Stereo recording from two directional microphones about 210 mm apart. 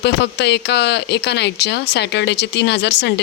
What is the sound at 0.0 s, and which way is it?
Speech, 55° left (ahead or behind).